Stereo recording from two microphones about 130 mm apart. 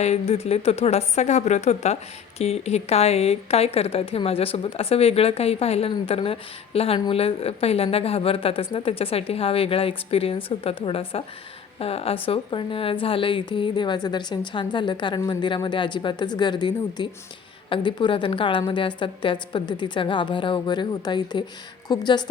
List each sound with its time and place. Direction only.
0.0 s a woman's voice: 55° left (ahead or behind); by 22.3 s 35° left (ahead or behind)